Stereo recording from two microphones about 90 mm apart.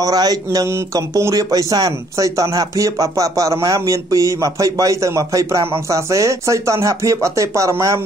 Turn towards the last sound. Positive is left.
turn(degrees=-35)  # may be behind; listen again after turning